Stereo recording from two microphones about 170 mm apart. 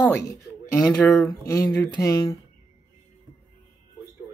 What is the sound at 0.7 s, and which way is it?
Speech, 15° left (ahead or behind).